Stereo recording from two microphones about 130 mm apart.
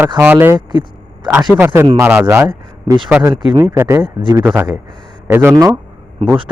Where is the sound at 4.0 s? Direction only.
40° right (ahead or behind).